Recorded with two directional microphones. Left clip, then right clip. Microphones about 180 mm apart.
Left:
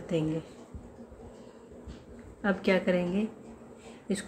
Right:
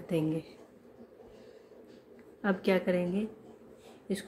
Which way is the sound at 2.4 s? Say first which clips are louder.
Left 2 dB; 10° right (ahead or behind).